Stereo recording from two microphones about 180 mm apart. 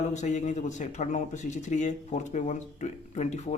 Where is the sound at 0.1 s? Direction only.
40° left (ahead or behind).